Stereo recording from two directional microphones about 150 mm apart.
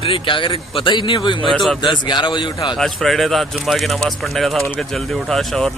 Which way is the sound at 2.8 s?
Centre (ahead or behind).